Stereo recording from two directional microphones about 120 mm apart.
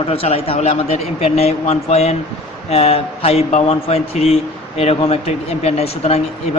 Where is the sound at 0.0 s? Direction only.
55° left (ahead or behind).